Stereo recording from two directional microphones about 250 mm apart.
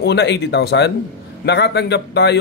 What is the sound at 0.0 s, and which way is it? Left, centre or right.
A man's voice, left.